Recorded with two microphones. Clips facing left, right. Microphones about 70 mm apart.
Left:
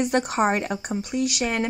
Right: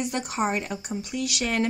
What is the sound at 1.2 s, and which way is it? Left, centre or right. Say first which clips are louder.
Speech: left 1 dB; left.